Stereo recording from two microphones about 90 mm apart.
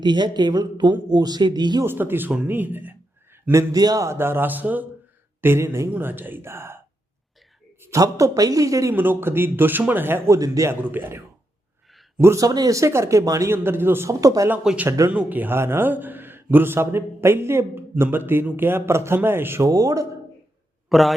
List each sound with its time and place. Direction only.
0.0 s speech: 55° right (ahead or behind)
1.8 s a man's voice: 25° right (ahead or behind)
3.5 s a man's voice: 35° right (ahead or behind)
7.8 s a man's voice: 35° right (ahead or behind)
9.0 s a man's voice: 25° right (ahead or behind)
10.3 s a man's voice: 40° right (ahead or behind)
10.7 s a man's voice: 20° right (ahead or behind)
12.2 s a man's voice: 35° right (ahead or behind)
13.6 s a man's voice: 25° right (ahead or behind)
14.6 s speech: 5° right (ahead or behind)
14.8 s a man's voice: 35° right (ahead or behind)
15.1 s a man's voice: 15° right (ahead or behind)
19.6 s a man's voice: 40° right (ahead or behind)
20.9 s a man's voice: centre (ahead or behind)